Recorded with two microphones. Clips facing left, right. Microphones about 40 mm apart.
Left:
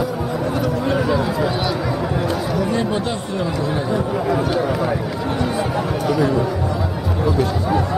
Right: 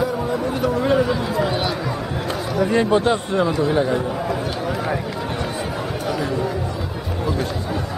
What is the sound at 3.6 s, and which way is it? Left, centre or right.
Chatter, centre.